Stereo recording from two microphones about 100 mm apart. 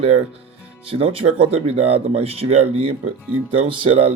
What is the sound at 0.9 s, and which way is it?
Speech, 70° right (ahead or behind).